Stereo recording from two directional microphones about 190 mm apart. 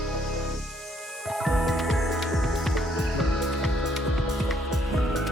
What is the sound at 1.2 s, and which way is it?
Music, centre (ahead or behind).